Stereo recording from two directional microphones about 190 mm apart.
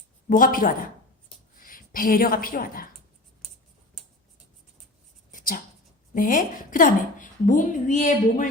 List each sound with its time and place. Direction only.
0.3 s a woman's voice: 45° left (ahead or behind)
5.3 s a sound: 45° left (ahead or behind)
6.1 s a woman's voice: 45° left (ahead or behind)